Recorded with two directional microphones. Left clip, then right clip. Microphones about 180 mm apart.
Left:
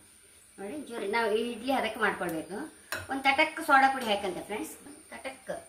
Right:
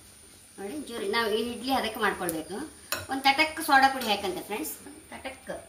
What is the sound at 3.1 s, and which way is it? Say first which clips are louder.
A woman's voice: right 2 dB; 10° left (ahead or behind).